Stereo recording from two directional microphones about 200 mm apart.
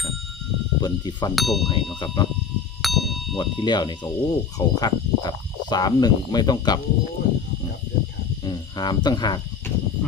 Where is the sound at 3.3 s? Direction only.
20° left (ahead or behind).